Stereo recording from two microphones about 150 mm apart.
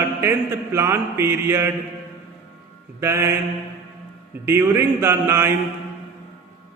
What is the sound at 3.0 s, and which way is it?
Mantra, 20° right (ahead or behind).